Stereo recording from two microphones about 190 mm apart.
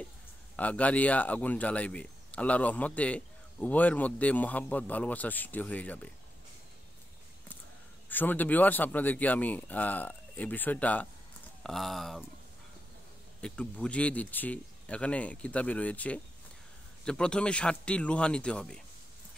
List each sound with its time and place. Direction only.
0.6 s speech: 5° left (ahead or behind)
8.1 s speech: 10° left (ahead or behind)
13.4 s speech: 5° left (ahead or behind)